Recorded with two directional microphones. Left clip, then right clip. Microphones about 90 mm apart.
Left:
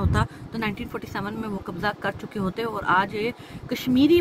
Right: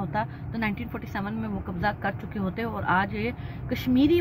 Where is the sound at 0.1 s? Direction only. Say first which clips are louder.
Left 2 dB; 45° left (ahead or behind).